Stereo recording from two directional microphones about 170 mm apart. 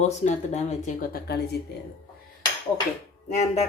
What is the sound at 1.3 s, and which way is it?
Speech, 70° left (ahead or behind).